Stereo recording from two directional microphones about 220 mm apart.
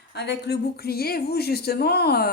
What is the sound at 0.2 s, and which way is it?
Speech, 50° left (ahead or behind).